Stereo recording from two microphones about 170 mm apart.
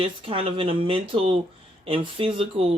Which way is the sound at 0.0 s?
30° right (ahead or behind).